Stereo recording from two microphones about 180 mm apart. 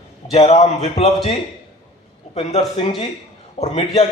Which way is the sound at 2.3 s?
35° left (ahead or behind).